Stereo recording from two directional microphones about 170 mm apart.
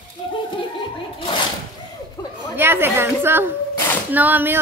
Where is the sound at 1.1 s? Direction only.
30° left (ahead or behind).